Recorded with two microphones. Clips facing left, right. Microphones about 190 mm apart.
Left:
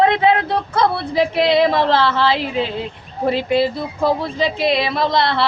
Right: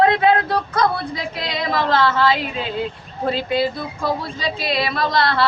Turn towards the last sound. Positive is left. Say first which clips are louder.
# left 2 dB
turn(degrees=25)  # may be behind; listen again after turning